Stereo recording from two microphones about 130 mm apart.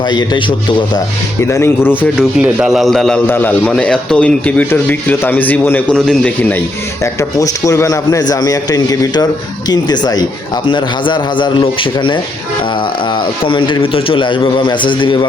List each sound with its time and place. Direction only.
0.0 s a man's voice: 35° left (ahead or behind)
1.4 s a man's voice: 20° left (ahead or behind)
2.4 s a man's voice: 5° right (ahead or behind)
3.2 s speech: 15° left (ahead or behind)
7.0 s a man's voice: 25° left (ahead or behind)